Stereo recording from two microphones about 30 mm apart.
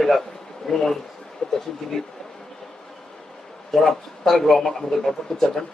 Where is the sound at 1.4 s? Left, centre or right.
Left.